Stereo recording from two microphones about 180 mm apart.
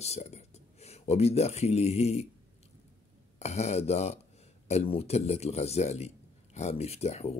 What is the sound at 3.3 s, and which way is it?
Speech, 40° left (ahead or behind).